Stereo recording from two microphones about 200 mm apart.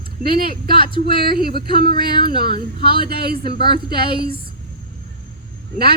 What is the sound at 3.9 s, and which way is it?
Speech, 25° left (ahead or behind).